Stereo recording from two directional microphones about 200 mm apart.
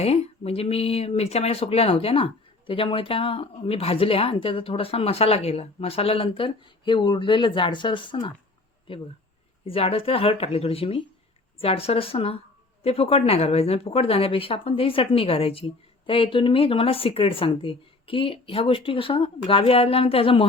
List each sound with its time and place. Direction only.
0.0 s speech: 30° left (ahead or behind)
9.6 s speech: 30° left (ahead or behind)